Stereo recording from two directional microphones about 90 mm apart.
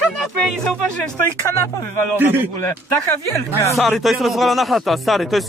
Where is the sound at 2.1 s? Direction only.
20° right (ahead or behind).